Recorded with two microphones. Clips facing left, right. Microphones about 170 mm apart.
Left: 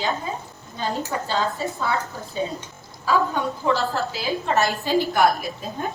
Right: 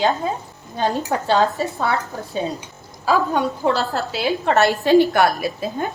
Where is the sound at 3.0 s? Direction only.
70° right (ahead or behind).